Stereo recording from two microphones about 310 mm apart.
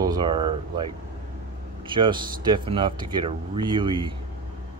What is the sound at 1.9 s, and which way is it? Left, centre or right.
Speech, centre.